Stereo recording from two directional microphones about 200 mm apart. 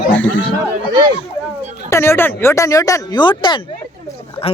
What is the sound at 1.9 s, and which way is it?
Speech, 15° left (ahead or behind).